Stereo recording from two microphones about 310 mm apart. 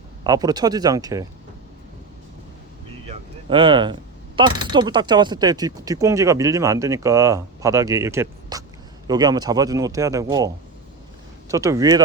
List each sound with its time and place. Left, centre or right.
0.3 s speech: centre
3.1 s a sound: centre
4.4 s speech: centre